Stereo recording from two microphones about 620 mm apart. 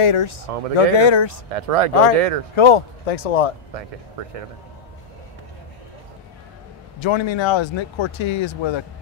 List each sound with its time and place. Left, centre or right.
0.0 s speech: left
1.5 s speech: right
2.0 s speech: left
7.0 s speech: left